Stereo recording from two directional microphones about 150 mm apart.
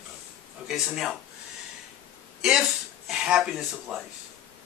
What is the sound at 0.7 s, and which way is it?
Speech, 5° right (ahead or behind).